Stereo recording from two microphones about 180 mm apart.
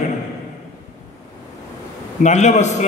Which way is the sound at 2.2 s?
40° left (ahead or behind).